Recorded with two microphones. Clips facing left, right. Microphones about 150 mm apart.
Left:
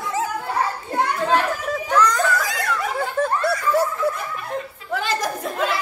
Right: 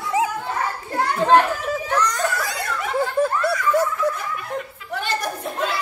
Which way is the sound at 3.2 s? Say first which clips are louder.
Right 2 dB; 10° right (ahead or behind).